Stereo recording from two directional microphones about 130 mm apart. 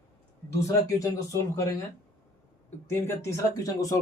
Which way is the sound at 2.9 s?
20° left (ahead or behind).